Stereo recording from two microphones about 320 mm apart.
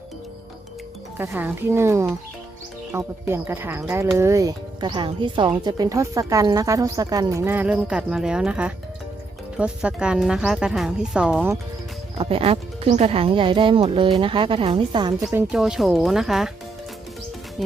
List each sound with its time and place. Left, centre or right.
1.2 s speech: centre
12.1 s speech: centre
15.2 s speech: centre